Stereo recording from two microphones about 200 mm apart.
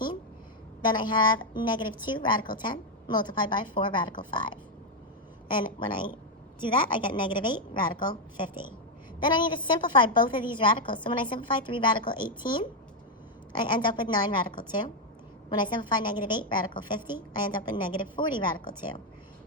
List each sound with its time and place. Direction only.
0.8 s a woman's voice: 20° left (ahead or behind)